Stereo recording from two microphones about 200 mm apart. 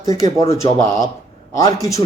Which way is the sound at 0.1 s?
15° left (ahead or behind).